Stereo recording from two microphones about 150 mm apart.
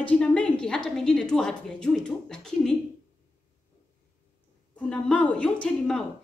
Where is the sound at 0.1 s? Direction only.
10° left (ahead or behind).